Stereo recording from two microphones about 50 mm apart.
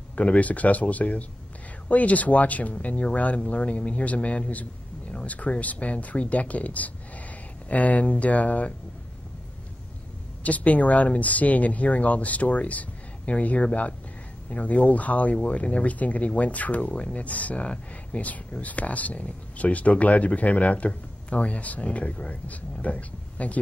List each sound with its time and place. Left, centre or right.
0.1 s speech: left
10.4 s speech: left